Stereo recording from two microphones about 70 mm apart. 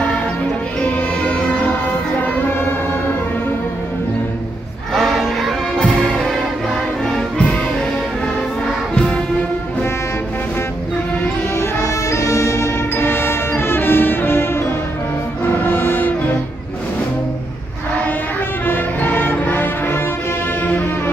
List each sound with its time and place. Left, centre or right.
0.7 s music: centre
4.9 s music: centre
7.1 s music: centre
8.9 s music: centre
11.5 s music: left
12.9 s music: left
15.6 s music: left
18.7 s music: left